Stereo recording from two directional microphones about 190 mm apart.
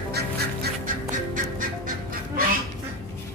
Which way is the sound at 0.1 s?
50° right (ahead or behind).